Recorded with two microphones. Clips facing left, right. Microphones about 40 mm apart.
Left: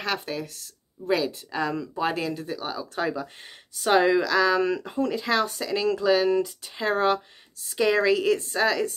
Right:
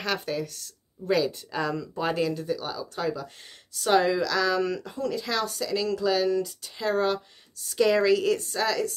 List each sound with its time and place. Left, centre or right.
0.0 s speech: centre; by 7.2 s left
7.7 s speech: centre